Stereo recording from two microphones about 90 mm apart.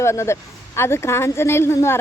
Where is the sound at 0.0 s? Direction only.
30° left (ahead or behind).